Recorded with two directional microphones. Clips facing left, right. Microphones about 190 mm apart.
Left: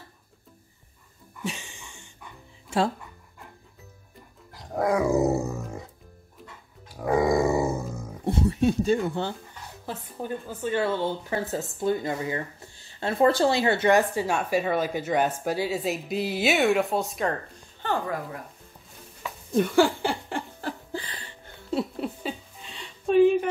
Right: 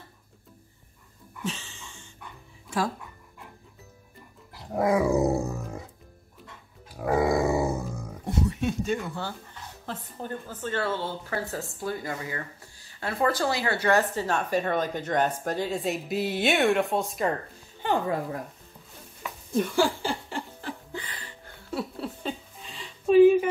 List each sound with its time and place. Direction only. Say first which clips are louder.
1.4 s a sound: even; 15° left (ahead or behind)
4.6 s dog: right 1 dB; 5° right (ahead or behind)
7.0 s grunt: left 1 dB; 5° right (ahead or behind)
8.3 s speech: left 5 dB; 30° left (ahead or behind)
9.8 s a woman's voice: left 3 dB; 10° left (ahead or behind)
17.8 s speech: right 2 dB; 20° right (ahead or behind)
19.7 s laughter: left 5 dB; 60° left (ahead or behind)
20.9 s a sound: left 3 dB; 30° left (ahead or behind)
22.2 s a sound: even; centre (ahead or behind)